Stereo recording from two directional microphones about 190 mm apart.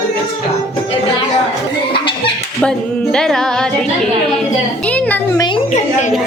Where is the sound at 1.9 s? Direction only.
25° left (ahead or behind).